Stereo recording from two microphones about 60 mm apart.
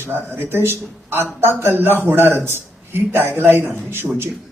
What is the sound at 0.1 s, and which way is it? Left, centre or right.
A man's voice, right.